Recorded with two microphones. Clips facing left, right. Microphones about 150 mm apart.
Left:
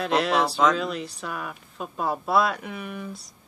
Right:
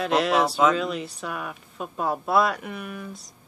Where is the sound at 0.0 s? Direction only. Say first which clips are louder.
Right 1 dB; centre (ahead or behind).